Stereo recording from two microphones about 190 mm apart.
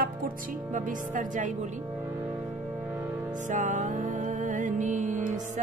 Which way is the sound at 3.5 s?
40° right (ahead or behind).